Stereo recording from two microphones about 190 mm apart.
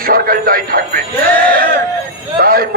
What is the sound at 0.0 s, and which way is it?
Speech, 50° right (ahead or behind).